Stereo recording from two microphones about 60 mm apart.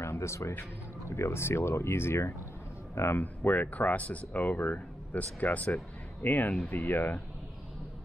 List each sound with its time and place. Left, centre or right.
0.0 s speech: left
3.2 s speech: left